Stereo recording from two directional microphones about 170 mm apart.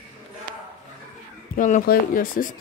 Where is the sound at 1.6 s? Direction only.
50° left (ahead or behind).